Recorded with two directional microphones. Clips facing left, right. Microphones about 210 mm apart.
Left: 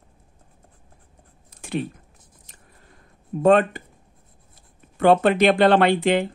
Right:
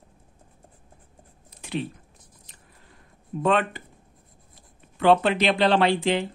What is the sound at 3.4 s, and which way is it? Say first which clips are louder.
Speech: left 6 dB; 45° left (ahead or behind).